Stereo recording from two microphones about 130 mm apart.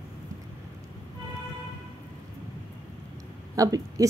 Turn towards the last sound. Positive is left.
turn(degrees=-25)  # may be behind; listen again after turning